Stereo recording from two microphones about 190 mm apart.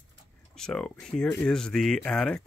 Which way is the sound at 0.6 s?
5° left (ahead or behind).